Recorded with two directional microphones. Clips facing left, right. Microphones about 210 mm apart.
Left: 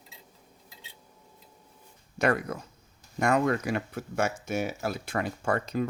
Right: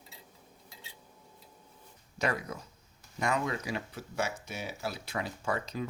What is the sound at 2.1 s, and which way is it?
Speech, 55° left (ahead or behind).